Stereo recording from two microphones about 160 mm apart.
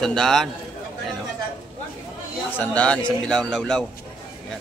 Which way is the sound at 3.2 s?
5° left (ahead or behind).